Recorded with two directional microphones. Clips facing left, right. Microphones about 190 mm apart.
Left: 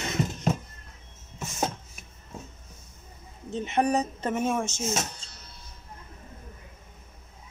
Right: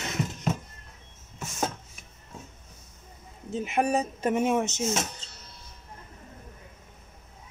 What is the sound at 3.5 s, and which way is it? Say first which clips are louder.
Speech: left 1 dB; 10° right (ahead or behind).